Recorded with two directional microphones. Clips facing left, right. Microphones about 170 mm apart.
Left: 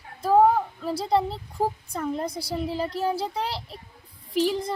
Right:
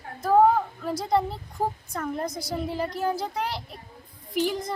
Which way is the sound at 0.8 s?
30° left (ahead or behind).